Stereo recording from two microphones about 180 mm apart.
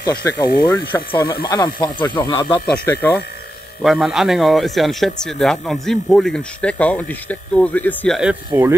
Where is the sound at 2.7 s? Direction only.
10° left (ahead or behind).